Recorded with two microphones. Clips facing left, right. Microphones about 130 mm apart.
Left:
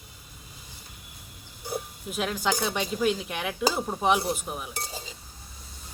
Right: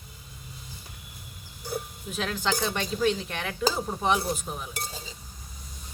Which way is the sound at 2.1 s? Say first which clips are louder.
Left 1 dB; 10° left (ahead or behind).